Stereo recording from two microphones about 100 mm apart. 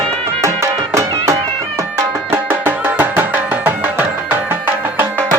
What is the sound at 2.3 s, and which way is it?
Music, 20° right (ahead or behind).